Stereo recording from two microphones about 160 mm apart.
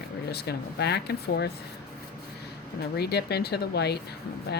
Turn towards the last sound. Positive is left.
turn(degrees=90)